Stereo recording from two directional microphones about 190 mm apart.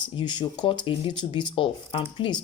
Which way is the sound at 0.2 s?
25° left (ahead or behind).